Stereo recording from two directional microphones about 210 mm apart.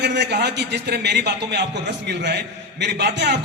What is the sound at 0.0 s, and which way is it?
A man's voice, 55° right (ahead or behind).